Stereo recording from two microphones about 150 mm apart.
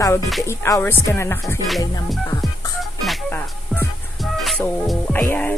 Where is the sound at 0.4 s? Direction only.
20° left (ahead or behind).